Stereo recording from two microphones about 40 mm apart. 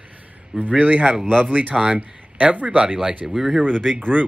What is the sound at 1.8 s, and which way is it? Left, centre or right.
Speech, right.